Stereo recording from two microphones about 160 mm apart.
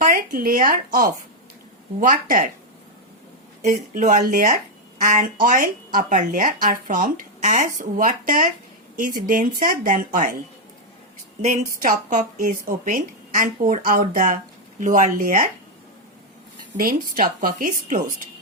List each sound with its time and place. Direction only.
0.0 s speech: 65° right (ahead or behind)
3.6 s speech: 50° right (ahead or behind)
11.4 s speech: 50° right (ahead or behind)
16.7 s speech: 60° right (ahead or behind)